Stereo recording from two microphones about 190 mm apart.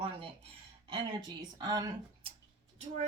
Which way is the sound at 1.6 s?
20° right (ahead or behind).